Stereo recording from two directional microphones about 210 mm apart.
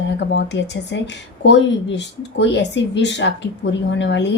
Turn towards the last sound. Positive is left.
turn(degrees=55)  # may be behind; listen again after turning